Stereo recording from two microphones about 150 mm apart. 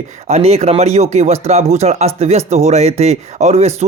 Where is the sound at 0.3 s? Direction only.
45° right (ahead or behind).